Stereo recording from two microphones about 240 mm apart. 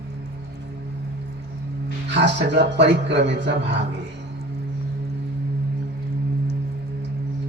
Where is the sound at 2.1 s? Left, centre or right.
Right.